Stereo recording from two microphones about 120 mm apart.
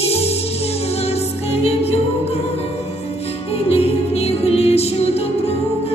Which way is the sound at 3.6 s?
60° left (ahead or behind).